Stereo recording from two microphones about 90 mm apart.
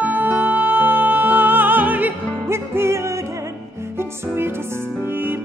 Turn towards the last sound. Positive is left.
turn(degrees=-25)  # may be behind; listen again after turning